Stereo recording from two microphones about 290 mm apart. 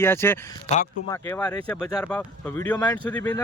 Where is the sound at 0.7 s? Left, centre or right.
Left.